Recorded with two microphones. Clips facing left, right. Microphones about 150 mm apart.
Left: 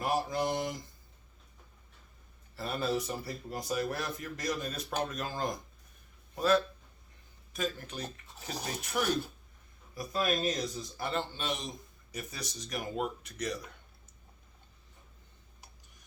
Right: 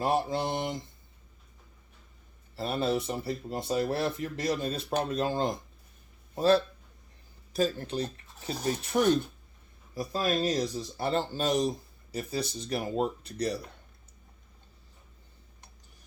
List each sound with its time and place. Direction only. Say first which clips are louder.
0.0 s speech: right 3 dB; 30° right (ahead or behind)
2.6 s a man's voice: right 4 dB; 25° right (ahead or behind)